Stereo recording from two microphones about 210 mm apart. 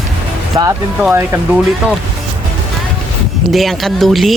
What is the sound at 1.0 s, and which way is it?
Speech, 10° right (ahead or behind).